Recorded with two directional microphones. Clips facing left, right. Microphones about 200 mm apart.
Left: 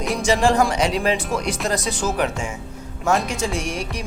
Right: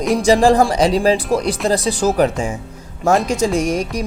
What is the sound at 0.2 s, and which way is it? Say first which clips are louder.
Speech: right 5 dB; 35° right (ahead or behind).